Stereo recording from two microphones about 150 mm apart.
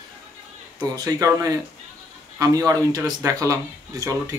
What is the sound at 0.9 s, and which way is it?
Speech, 25° right (ahead or behind).